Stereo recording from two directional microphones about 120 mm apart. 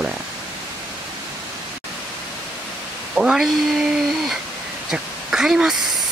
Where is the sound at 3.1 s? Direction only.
5° right (ahead or behind).